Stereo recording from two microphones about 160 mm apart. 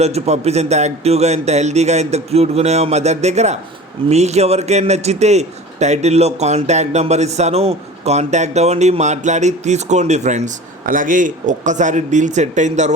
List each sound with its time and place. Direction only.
0.0 s a man's voice: 40° right (ahead or behind)